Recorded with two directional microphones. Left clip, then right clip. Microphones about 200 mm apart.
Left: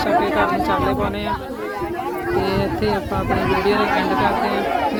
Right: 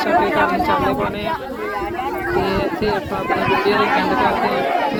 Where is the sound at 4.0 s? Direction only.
Centre (ahead or behind).